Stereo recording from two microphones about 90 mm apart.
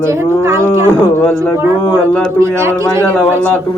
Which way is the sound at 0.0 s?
30° right (ahead or behind).